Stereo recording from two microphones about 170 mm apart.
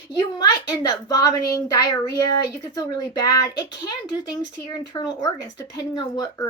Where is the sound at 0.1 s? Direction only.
25° left (ahead or behind).